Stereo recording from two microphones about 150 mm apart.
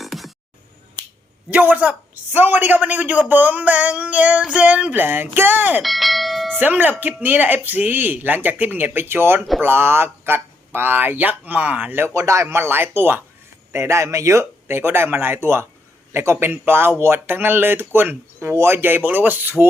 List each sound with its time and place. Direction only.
0.0 s music: centre (ahead or behind)
1.5 s a man's voice: 10° right (ahead or behind)
5.8 s bell: centre (ahead or behind)
6.6 s a man's voice: 10° right (ahead or behind)